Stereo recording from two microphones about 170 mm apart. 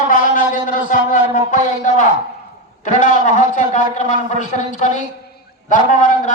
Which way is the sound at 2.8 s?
50° left (ahead or behind).